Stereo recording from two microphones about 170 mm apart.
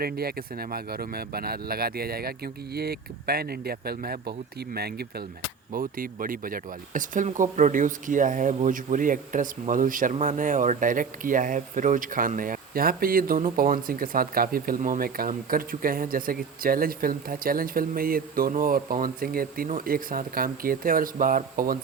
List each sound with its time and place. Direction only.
0.0 s speech: 65° right (ahead or behind)
5.7 s speech: 55° right (ahead or behind)